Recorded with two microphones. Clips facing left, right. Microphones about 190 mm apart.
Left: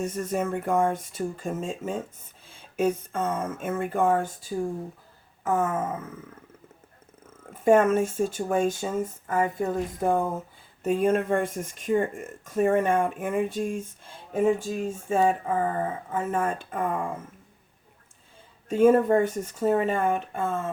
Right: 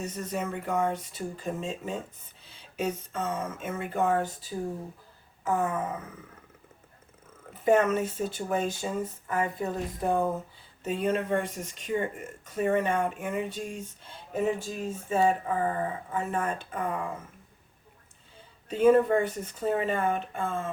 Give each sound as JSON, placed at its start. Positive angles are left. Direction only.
{"t": 0.0, "sound": "speech", "side_deg": 50}
{"t": 7.5, "sound": "speech", "side_deg": 50}
{"t": 18.7, "sound": "speech", "side_deg": 45}